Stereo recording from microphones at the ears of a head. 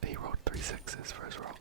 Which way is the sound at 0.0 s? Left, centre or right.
Right.